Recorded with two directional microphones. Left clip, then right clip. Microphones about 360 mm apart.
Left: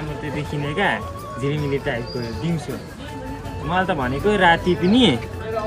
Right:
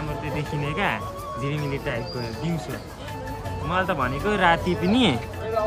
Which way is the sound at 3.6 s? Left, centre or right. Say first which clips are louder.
Left 3 dB; centre.